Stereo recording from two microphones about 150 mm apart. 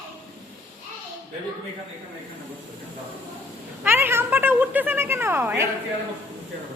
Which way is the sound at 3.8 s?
15° right (ahead or behind).